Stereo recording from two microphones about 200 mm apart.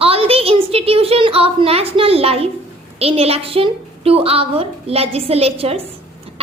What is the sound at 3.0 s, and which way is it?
A woman's voice, 30° right (ahead or behind).